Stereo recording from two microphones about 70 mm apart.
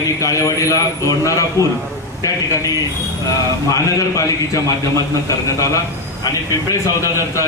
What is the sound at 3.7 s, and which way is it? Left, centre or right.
Speech, left.